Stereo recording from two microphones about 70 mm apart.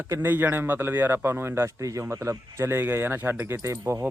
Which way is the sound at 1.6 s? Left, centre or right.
Right.